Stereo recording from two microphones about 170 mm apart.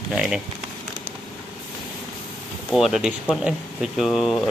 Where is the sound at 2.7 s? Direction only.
Centre (ahead or behind).